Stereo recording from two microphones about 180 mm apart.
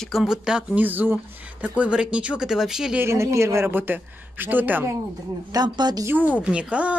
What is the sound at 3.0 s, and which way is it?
Speech, 15° right (ahead or behind).